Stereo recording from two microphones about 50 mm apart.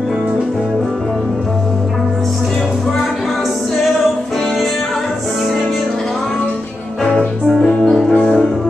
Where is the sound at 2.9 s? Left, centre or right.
Centre.